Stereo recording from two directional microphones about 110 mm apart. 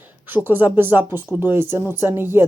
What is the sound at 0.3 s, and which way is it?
Speech, 15° right (ahead or behind).